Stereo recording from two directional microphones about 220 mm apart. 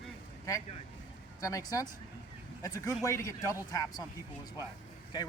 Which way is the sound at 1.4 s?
15° left (ahead or behind).